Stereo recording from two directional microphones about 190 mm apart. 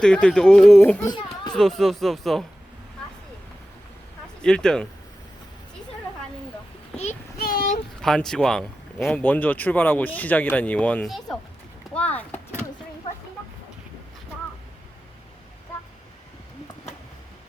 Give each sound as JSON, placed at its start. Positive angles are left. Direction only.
{"t": 0.0, "sound": "speech", "side_deg": 5}
{"t": 1.0, "sound": "a child's voice", "side_deg": 20}
{"t": 1.5, "sound": "speech", "side_deg": 0}
{"t": 4.4, "sound": "speech", "side_deg": 5}
{"t": 6.9, "sound": "child singing", "side_deg": 35}
{"t": 7.3, "sound": "child singing", "side_deg": 50}
{"t": 8.0, "sound": "speech", "side_deg": 0}